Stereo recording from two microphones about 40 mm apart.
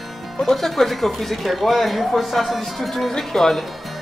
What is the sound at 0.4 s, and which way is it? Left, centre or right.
Speech, centre.